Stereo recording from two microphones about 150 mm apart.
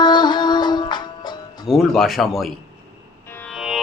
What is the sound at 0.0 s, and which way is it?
Music, 30° left (ahead or behind).